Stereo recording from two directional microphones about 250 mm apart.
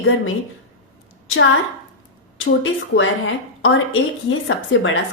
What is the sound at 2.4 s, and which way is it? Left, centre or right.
A woman's voice, left.